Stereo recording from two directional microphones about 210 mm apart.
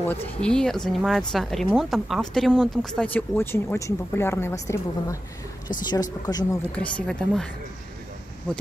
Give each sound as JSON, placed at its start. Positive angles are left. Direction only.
{"t": 0.0, "sound": "speech", "side_deg": 10}
{"t": 6.2, "sound": "speech", "side_deg": 15}
{"t": 6.7, "sound": "speech", "side_deg": 5}